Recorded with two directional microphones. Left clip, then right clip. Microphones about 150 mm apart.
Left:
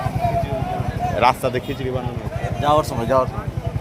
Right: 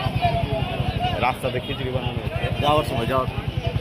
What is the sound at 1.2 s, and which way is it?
Speech, 55° left (ahead or behind).